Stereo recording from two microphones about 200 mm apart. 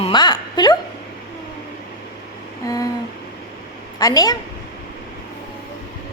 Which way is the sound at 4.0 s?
20° left (ahead or behind).